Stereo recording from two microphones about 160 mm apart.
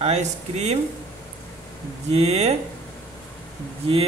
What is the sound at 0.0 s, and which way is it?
Speech, 45° right (ahead or behind).